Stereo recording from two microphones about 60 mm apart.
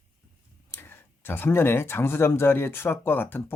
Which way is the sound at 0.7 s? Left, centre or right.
Left.